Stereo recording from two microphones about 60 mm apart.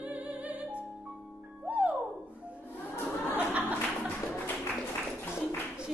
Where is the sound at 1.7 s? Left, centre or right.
Right.